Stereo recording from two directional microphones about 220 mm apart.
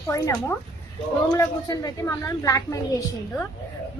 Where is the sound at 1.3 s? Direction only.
15° left (ahead or behind).